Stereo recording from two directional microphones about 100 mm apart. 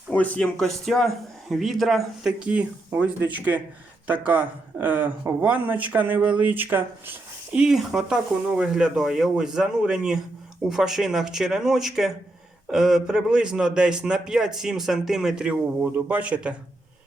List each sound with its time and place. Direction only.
0.1 s a man's voice: 15° left (ahead or behind); by 7.6 s 20° right (ahead or behind)
7.6 s a man's voice: 5° right (ahead or behind)